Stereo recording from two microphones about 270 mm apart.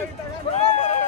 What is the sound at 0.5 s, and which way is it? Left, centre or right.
Speech, left.